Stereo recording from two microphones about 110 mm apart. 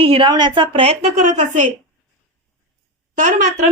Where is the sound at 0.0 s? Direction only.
50° right (ahead or behind); by 1.6 s 90° right.